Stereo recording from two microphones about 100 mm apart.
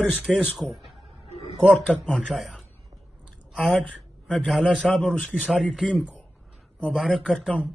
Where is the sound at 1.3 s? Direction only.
90° left.